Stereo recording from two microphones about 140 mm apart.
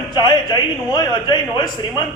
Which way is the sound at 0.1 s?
30° left (ahead or behind).